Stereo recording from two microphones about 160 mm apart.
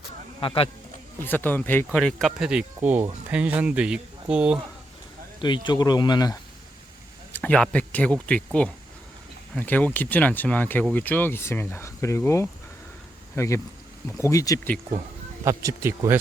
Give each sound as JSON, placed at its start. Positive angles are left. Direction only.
{"t": 0.3, "sound": "speech", "side_deg": 35}
{"t": 1.2, "sound": "speech", "side_deg": 10}
{"t": 5.4, "sound": "speech", "side_deg": 30}
{"t": 7.3, "sound": "speech", "side_deg": 5}
{"t": 15.4, "sound": "speech", "side_deg": -20}